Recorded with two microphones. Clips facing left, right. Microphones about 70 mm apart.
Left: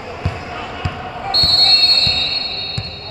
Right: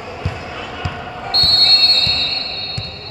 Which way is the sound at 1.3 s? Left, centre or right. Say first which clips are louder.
Right 1 dB; left.